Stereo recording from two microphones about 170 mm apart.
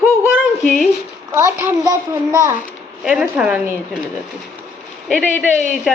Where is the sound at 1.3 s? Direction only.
15° right (ahead or behind).